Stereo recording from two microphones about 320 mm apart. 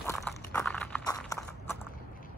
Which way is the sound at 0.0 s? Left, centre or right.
Centre.